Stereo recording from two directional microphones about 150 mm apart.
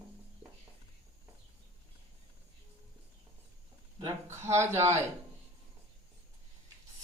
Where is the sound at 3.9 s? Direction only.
45° right (ahead or behind).